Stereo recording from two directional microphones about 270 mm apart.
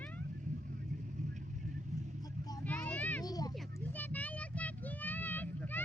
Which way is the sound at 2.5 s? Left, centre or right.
Centre.